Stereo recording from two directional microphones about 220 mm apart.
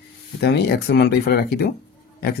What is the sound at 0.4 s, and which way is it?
Speech, 45° left (ahead or behind).